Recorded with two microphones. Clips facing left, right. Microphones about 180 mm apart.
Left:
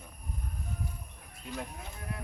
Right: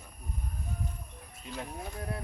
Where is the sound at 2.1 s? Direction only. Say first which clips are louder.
Even; 35° right (ahead or behind).